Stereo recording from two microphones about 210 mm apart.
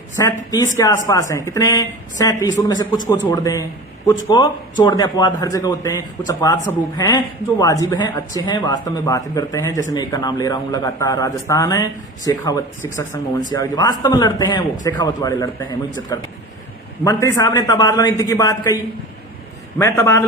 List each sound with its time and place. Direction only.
0.2 s a man's voice: 15° left (ahead or behind)
19.8 s a man's voice: 15° left (ahead or behind)